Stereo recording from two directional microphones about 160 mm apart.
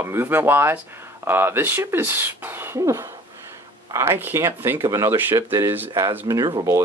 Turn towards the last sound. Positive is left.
turn(degrees=-20)  # may be behind; listen again after turning